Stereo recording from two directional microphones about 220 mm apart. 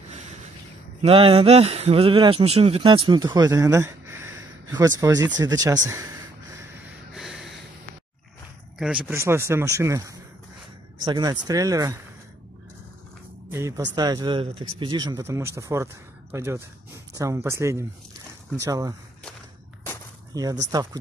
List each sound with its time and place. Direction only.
1.0 s speech: 25° right (ahead or behind)
8.7 s speech: 5° right (ahead or behind)
13.5 s speech: 15° right (ahead or behind)
20.3 s speech: 15° right (ahead or behind)